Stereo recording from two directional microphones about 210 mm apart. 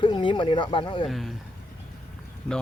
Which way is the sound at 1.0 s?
Centre (ahead or behind).